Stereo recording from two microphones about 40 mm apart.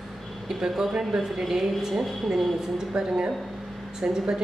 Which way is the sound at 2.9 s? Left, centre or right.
Centre.